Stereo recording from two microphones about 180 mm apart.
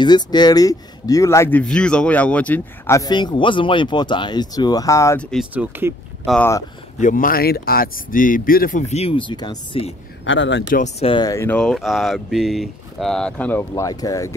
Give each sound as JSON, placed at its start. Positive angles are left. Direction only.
{"t": 0.0, "sound": "speech", "side_deg": 25}
{"t": 5.2, "sound": "speech", "side_deg": 0}
{"t": 5.5, "sound": "speech", "side_deg": -10}
{"t": 7.0, "sound": "speech", "side_deg": 50}
{"t": 10.2, "sound": "speech", "side_deg": 90}
{"t": 10.7, "sound": "speech", "side_deg": 40}
{"t": 11.5, "sound": "speech", "side_deg": 0}